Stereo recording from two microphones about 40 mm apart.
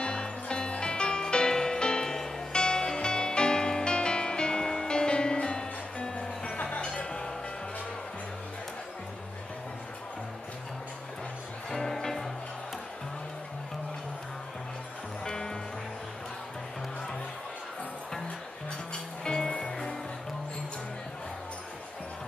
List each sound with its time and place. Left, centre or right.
0.0 s music: left
11.7 s music: centre
15.2 s music: centre
19.2 s music: centre